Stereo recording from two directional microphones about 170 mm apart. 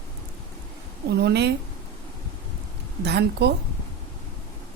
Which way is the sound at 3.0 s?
75° right (ahead or behind).